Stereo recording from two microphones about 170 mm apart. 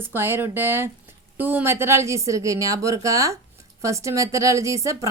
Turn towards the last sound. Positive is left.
turn(degrees=-20)  # may be behind; listen again after turning